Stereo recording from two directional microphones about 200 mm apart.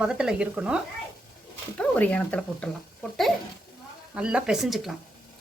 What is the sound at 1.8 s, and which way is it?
Speech, 5° left (ahead or behind).